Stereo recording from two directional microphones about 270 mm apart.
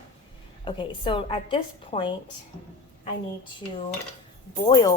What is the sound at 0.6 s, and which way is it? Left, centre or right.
Speech, centre.